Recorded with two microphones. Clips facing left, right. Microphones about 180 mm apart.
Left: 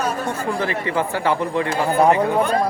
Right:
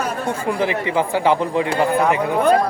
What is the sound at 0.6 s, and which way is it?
Speech, 15° right (ahead or behind).